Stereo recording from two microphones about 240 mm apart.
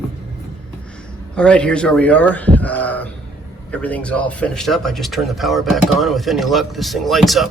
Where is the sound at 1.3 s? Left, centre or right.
Centre.